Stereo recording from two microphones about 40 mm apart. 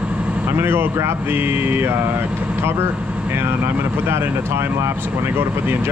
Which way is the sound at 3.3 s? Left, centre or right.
Right.